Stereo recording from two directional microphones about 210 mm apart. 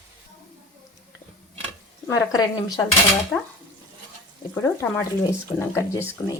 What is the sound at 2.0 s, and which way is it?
Speech, 15° left (ahead or behind).